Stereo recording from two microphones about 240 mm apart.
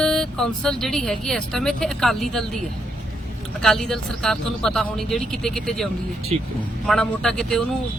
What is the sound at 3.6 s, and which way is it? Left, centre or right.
Speech, centre.